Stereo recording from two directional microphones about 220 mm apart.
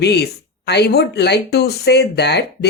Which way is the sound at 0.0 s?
50° left (ahead or behind).